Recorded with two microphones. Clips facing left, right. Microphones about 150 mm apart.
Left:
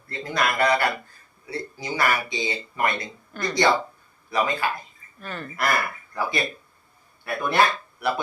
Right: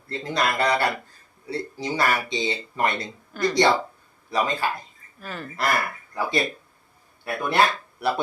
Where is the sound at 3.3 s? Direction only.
5° right (ahead or behind).